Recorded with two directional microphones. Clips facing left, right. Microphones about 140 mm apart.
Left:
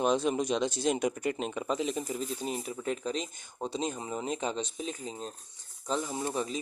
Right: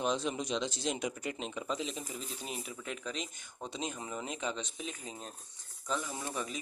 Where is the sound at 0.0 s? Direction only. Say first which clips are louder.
Left 6 dB; 50° left (ahead or behind).